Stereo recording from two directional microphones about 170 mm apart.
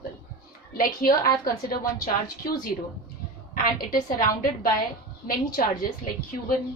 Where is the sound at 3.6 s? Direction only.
55° left (ahead or behind).